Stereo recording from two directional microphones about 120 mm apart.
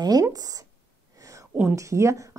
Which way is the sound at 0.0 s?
30° right (ahead or behind).